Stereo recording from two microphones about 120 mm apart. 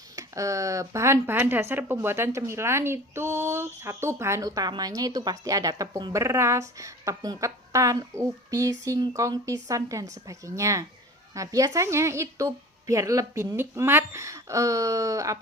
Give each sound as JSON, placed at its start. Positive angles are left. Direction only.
{"t": 0.2, "sound": "a woman's voice", "side_deg": -25}